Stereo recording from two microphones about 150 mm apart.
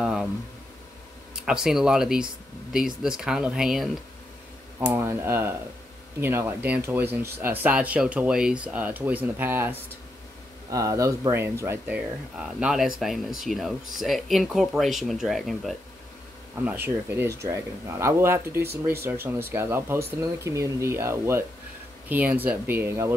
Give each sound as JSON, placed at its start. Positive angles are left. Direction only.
{"t": 0.0, "sound": "a sound", "side_deg": -5}
{"t": 1.4, "sound": "speech", "side_deg": -5}
{"t": 4.7, "sound": "speech", "side_deg": -15}
{"t": 12.4, "sound": "speech", "side_deg": -5}
{"t": 16.6, "sound": "speech", "side_deg": -15}